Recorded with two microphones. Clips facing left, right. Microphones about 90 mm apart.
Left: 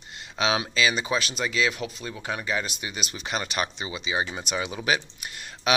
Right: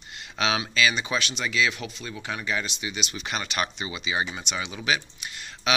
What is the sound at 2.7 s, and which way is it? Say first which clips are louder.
Speech: right 1 dB; 45° left (ahead or behind).